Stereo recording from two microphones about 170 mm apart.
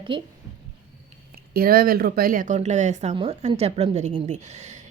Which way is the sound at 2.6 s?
45° right (ahead or behind).